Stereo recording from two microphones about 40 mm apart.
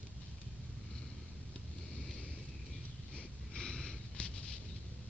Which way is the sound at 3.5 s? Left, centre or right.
Centre.